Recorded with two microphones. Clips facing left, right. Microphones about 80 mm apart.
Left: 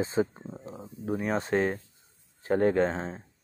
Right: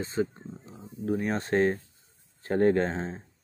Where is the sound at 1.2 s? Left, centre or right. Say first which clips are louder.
Right 1 dB; centre.